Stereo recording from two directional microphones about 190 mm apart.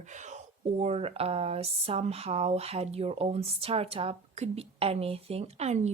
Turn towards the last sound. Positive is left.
turn(degrees=-35)  # may be behind; listen again after turning